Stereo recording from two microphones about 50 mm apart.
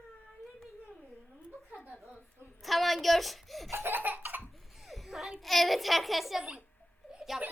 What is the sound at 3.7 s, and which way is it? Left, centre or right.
Laughter, right.